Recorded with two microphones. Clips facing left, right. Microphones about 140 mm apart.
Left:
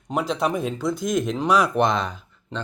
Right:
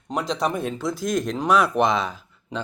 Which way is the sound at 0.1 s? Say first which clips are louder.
Left 1 dB; centre (ahead or behind).